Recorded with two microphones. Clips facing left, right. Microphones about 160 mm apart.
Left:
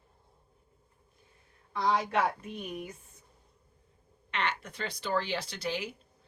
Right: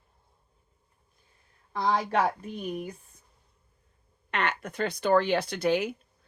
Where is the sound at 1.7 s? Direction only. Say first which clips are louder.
Right 2 dB; 35° right (ahead or behind).